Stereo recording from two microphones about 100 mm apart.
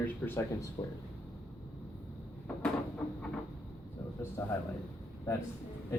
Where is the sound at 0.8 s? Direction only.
35° left (ahead or behind).